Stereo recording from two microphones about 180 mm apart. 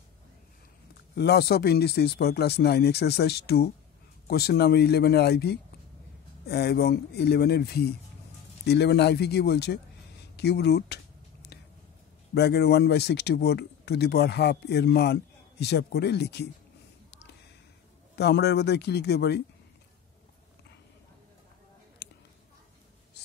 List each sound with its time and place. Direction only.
1.1 s speech: 65° left (ahead or behind)
12.4 s speech: 65° left (ahead or behind)
18.1 s speech: 65° left (ahead or behind)
22.0 s a sound: 70° left (ahead or behind)